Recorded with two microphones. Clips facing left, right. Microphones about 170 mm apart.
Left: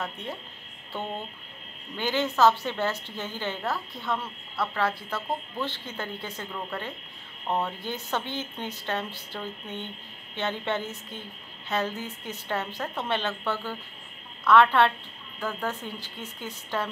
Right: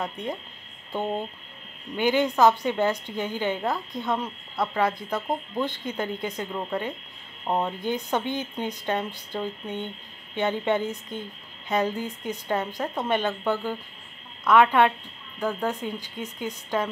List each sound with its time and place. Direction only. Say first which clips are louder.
0.0 s a woman's voice: right 4 dB; 15° right (ahead or behind)
2.0 s a woman's voice: right 3 dB; 15° right (ahead or behind)